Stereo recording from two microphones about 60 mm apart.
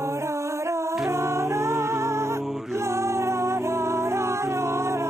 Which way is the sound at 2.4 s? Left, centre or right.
Centre.